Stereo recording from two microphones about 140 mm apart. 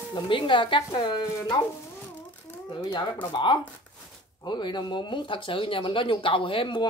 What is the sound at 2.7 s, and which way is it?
Speech, 35° left (ahead or behind).